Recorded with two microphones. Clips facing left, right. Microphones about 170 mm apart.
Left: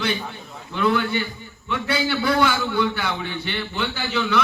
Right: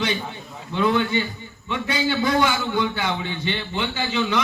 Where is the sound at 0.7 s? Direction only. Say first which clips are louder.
Right 1 dB; 20° right (ahead or behind).